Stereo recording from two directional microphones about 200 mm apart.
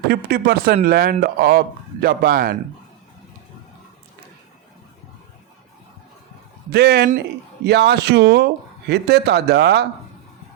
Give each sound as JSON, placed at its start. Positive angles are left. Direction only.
{"t": 0.1, "sound": "speech", "side_deg": -50}
{"t": 6.7, "sound": "speech", "side_deg": -55}